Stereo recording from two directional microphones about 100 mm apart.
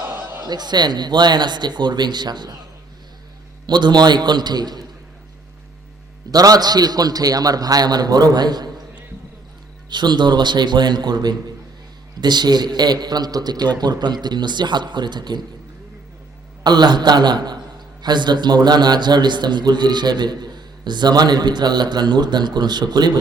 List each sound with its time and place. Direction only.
0.1 s chuckle: 20° right (ahead or behind)
0.4 s a man's voice: 45° right (ahead or behind)
3.7 s a man's voice: 50° right (ahead or behind)
6.3 s a man's voice: 40° right (ahead or behind)
9.9 s a man's voice: 50° right (ahead or behind)
16.6 s a man's voice: 45° right (ahead or behind)